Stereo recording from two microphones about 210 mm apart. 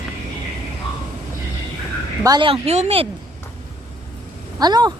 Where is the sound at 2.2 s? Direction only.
20° right (ahead or behind).